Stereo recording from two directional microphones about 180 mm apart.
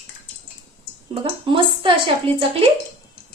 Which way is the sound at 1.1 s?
30° right (ahead or behind).